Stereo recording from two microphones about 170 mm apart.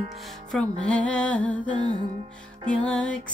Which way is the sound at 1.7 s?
30° right (ahead or behind).